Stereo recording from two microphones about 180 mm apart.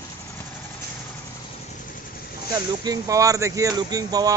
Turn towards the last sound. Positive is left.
turn(degrees=-20)  # may be behind; listen again after turning